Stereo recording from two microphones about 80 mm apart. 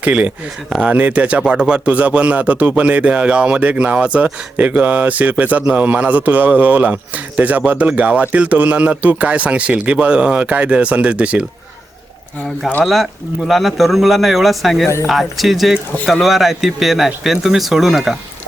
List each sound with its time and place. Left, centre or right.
0.0 s speech: centre
12.8 s a man's voice: centre